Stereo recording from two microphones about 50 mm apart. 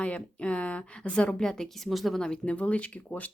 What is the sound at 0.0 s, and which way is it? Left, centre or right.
A woman's voice, left.